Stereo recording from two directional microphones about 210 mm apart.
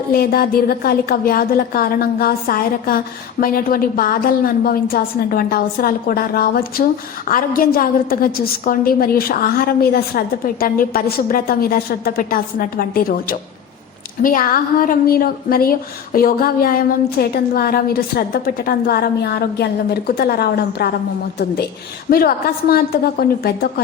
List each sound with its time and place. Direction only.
0.1 s a woman's voice: 45° left (ahead or behind)
22.1 s a woman's voice: 45° left (ahead or behind)